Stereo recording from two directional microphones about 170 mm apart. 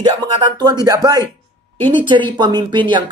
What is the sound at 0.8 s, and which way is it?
Speech, 20° right (ahead or behind).